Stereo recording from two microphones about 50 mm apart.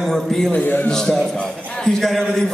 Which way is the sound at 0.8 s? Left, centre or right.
Centre.